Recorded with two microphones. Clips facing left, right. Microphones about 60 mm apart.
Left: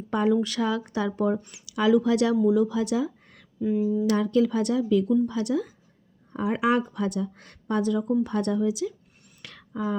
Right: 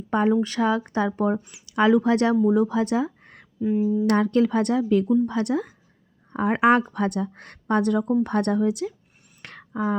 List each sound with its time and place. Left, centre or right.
0.1 s speech: right
1.4 s speech: centre
1.7 s speech: right
3.6 s a sound: centre
4.0 s speech: right
9.4 s a sound: right